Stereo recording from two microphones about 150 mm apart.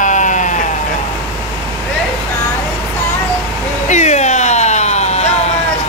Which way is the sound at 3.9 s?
50° left (ahead or behind).